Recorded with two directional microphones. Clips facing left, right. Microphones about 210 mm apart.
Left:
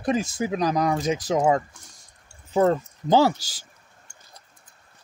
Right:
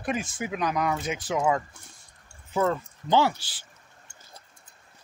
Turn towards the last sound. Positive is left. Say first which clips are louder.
# left 4 dB
turn(degrees=40)  # may be behind; listen again after turning